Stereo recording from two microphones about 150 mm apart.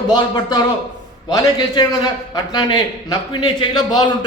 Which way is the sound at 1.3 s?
25° left (ahead or behind).